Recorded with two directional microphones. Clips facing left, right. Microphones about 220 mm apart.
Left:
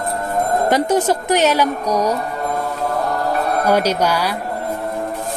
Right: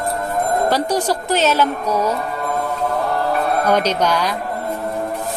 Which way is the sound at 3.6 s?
10° left (ahead or behind).